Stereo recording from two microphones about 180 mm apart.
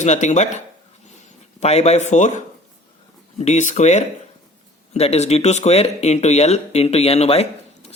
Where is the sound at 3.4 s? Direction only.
40° left (ahead or behind).